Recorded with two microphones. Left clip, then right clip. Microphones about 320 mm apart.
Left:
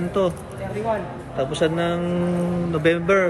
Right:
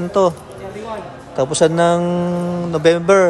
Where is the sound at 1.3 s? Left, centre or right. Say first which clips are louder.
Right 7 dB; centre.